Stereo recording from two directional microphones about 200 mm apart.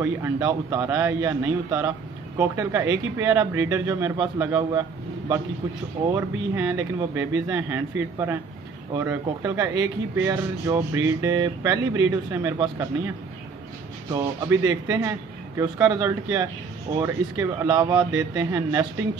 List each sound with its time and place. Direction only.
0.0 s speech: 15° right (ahead or behind)
6.1 s speech: 10° right (ahead or behind)
14.1 s speech: 20° right (ahead or behind)